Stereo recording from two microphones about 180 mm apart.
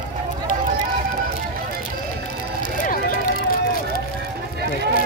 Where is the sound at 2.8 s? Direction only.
50° left (ahead or behind).